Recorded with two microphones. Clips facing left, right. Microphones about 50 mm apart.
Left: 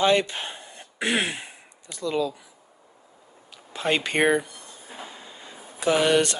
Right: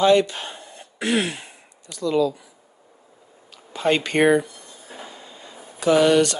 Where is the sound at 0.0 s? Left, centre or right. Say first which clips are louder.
Right 4 dB; left.